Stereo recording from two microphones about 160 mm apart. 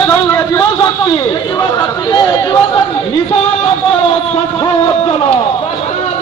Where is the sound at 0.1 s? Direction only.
20° left (ahead or behind).